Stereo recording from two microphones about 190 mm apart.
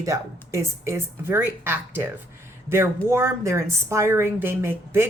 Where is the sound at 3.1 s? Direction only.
15° right (ahead or behind).